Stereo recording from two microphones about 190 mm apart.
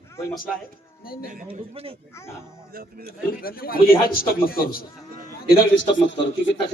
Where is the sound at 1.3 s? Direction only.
45° right (ahead or behind).